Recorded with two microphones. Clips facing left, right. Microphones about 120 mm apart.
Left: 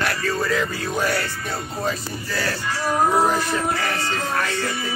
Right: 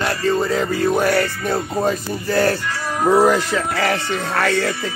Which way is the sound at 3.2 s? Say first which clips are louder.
Right 4 dB; 90° right.